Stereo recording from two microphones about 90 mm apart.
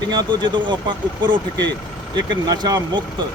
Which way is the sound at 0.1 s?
55° right (ahead or behind).